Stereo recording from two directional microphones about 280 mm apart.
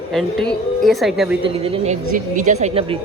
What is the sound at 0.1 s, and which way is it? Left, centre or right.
A woman's voice, centre.